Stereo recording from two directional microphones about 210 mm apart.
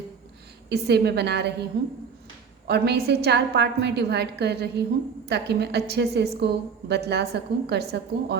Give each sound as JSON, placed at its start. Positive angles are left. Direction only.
{"t": 0.7, "sound": "a woman's voice", "side_deg": -50}